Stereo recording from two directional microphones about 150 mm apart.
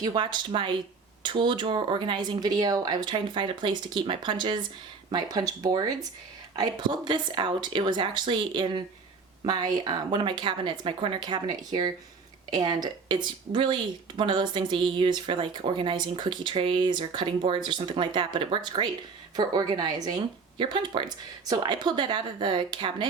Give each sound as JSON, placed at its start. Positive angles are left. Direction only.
{"t": 0.0, "sound": "speech", "side_deg": -30}